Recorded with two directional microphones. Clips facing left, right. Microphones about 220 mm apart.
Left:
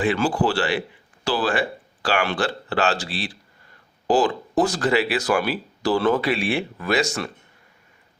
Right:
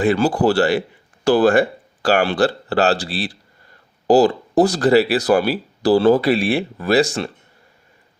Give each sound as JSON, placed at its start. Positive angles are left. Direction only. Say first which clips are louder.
{"t": 0.0, "sound": "speech", "louder": "right 5 dB", "side_deg": -40}